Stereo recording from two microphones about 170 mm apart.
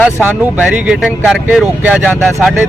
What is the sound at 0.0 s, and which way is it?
Speech, 10° right (ahead or behind).